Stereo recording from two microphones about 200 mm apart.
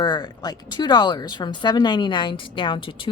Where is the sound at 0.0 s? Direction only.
20° left (ahead or behind).